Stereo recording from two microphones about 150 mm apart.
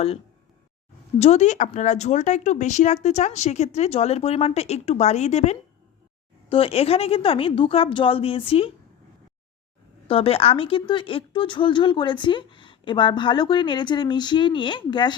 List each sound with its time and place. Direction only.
1.2 s speech: 50° left (ahead or behind)
10.1 s speech: 40° left (ahead or behind)